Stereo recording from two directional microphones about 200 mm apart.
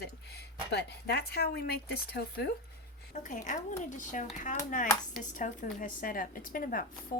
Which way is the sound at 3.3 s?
40° left (ahead or behind).